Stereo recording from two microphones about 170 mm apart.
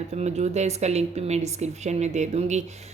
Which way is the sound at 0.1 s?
40° right (ahead or behind).